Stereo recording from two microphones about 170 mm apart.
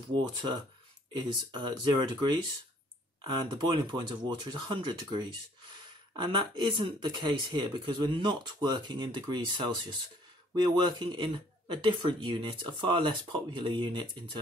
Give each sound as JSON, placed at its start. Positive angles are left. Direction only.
{"t": 0.1, "sound": "speech", "side_deg": -25}